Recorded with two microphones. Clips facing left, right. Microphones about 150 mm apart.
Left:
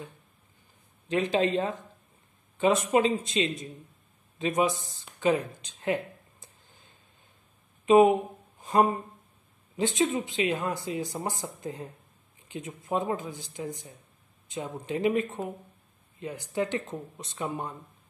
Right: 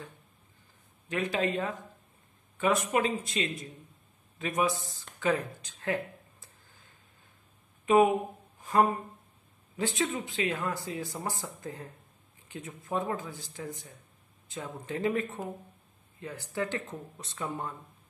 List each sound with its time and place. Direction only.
1.0 s speech: 25° left (ahead or behind)
6.4 s a sound: 20° left (ahead or behind)
9.8 s speech: 20° left (ahead or behind)